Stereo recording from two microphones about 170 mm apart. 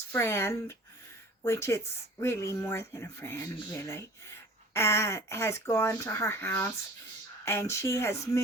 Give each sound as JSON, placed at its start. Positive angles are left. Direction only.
{"t": 0.1, "sound": "speech", "side_deg": 15}